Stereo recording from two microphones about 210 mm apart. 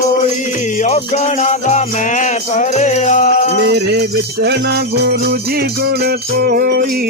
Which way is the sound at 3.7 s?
50° right (ahead or behind).